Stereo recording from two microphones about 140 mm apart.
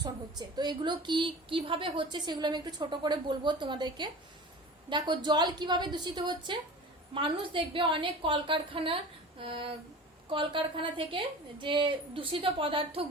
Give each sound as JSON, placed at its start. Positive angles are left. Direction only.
{"t": 0.0, "sound": "a woman's voice", "side_deg": -30}